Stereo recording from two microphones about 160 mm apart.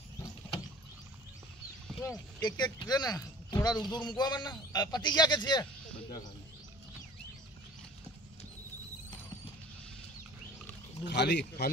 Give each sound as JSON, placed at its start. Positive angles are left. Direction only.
{"t": 2.0, "sound": "speech", "side_deg": 20}
{"t": 11.1, "sound": "speech", "side_deg": 90}